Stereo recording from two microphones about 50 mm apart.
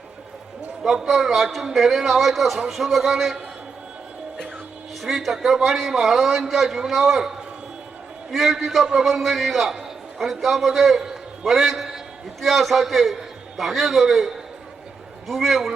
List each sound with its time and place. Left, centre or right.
0.8 s a man's voice: centre
5.0 s a man's voice: centre